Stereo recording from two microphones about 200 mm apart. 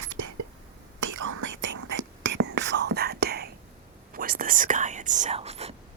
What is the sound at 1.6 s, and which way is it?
Whispering, 65° right (ahead or behind).